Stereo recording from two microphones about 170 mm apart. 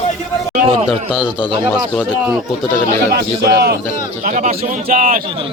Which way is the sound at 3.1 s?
70° right (ahead or behind).